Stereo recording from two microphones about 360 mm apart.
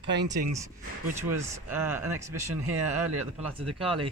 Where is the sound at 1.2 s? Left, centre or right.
Centre.